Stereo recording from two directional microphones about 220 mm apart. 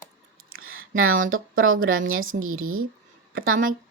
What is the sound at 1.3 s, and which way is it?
Speech, 65° right (ahead or behind).